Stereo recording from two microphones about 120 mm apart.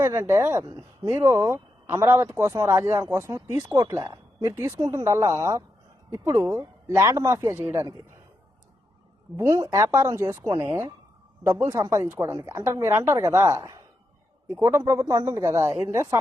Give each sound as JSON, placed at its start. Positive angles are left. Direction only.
{"t": 0.0, "sound": "speech", "side_deg": -20}
{"t": 9.3, "sound": "speech", "side_deg": -20}
{"t": 15.6, "sound": "speech", "side_deg": -20}